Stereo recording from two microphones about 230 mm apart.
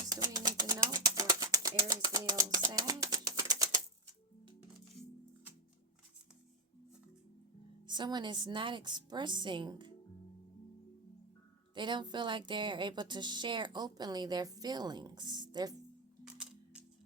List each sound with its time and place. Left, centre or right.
0.1 s bird: centre
7.9 s speech: centre
11.7 s speech: centre